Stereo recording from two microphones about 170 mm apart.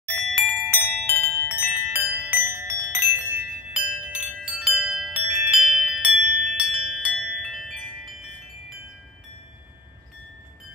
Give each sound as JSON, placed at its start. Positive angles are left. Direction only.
{"t": 0.3, "sound": "wind chime", "side_deg": -15}
{"t": 1.5, "sound": "music", "side_deg": -10}